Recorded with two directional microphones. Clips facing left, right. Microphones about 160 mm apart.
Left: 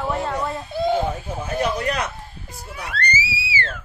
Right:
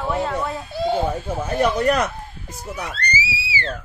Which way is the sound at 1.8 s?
45° right (ahead or behind).